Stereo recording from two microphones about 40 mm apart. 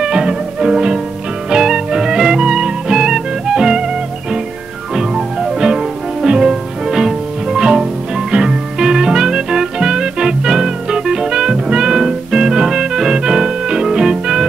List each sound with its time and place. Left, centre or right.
0.0 s music: centre